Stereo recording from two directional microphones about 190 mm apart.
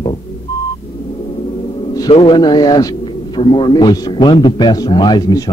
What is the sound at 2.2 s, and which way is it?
A man's voice, 20° left (ahead or behind).